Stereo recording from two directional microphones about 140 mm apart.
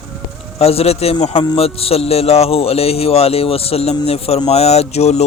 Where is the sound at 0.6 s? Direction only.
45° left (ahead or behind).